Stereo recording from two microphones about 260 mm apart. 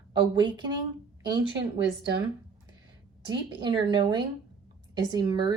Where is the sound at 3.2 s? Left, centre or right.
Centre.